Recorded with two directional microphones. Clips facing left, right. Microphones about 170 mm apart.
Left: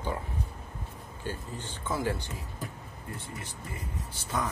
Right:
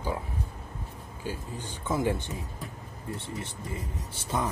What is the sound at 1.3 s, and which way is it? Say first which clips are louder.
Speech: right 1 dB; 10° right (ahead or behind).